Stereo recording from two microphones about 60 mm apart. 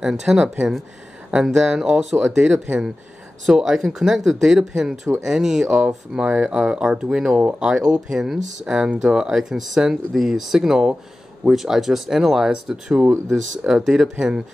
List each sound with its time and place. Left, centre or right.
0.0 s speech: centre